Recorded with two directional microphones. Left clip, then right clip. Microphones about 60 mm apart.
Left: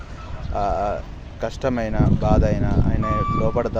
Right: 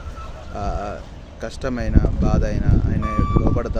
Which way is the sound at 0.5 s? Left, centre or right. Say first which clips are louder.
Left 6 dB; right.